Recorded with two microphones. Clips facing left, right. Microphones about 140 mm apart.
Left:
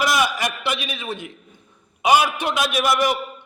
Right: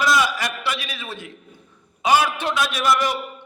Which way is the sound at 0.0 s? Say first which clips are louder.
Even; 20° left (ahead or behind).